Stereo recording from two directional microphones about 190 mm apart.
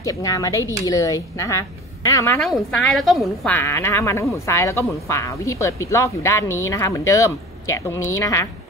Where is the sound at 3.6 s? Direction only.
15° left (ahead or behind).